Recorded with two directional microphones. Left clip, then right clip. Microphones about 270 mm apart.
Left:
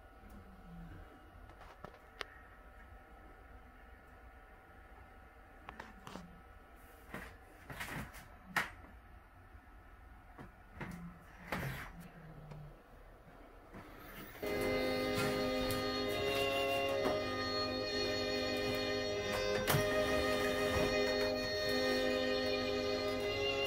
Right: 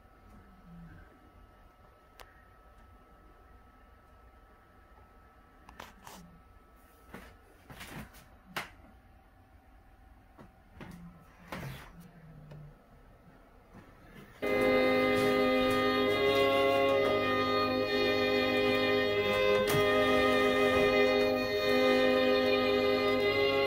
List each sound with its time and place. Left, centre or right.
14.4 s music: right